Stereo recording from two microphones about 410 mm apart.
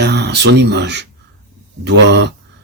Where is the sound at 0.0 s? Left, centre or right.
Right.